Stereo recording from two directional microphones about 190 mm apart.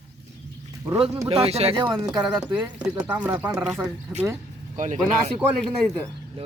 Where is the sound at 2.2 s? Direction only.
25° right (ahead or behind).